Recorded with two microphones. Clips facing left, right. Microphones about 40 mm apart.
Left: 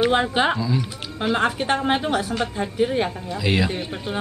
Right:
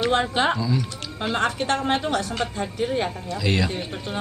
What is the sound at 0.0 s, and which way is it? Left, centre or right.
Speech, centre.